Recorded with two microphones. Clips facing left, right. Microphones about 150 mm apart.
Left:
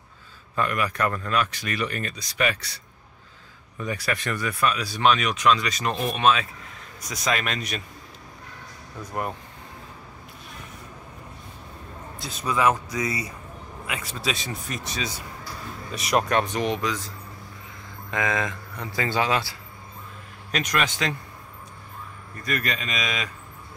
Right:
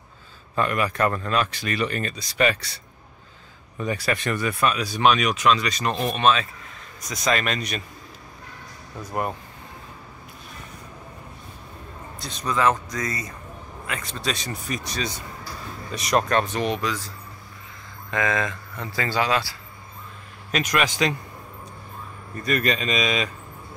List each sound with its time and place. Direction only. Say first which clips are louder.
0.6 s speech: right 2 dB; 30° right (ahead or behind)
3.7 s speech: right 3 dB; 25° right (ahead or behind); by 7.8 s centre (ahead or behind)
12.2 s speech: even; 5° left (ahead or behind)
18.1 s speech: right 2 dB; 15° left (ahead or behind)
20.5 s speech: right 3 dB; 5° right (ahead or behind)
22.4 s speech: right 5 dB; 25° right (ahead or behind)